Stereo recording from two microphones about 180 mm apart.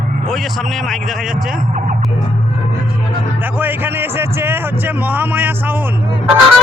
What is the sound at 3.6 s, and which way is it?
Speech, 10° right (ahead or behind).